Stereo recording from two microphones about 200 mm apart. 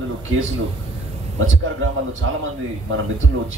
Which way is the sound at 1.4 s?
75° right (ahead or behind).